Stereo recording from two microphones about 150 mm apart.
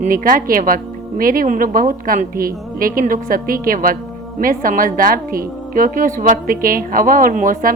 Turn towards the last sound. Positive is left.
turn(degrees=-65)  # may be behind; listen again after turning